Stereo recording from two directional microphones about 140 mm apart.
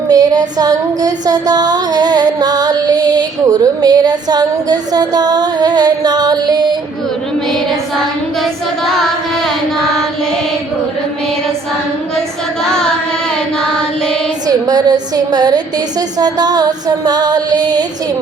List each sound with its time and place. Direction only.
0.1 s music: 25° right (ahead or behind)
12.6 s carnatic music: 5° left (ahead or behind)
14.4 s a woman's voice: 30° right (ahead or behind)
15.1 s music: 30° right (ahead or behind)